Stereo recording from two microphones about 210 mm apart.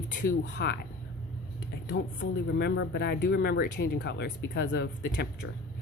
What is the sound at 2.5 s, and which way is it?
Speech, 55° left (ahead or behind).